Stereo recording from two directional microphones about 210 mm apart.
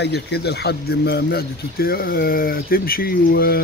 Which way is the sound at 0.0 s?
50° left (ahead or behind).